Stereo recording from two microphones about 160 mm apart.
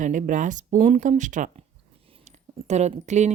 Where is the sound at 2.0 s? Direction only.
40° right (ahead or behind).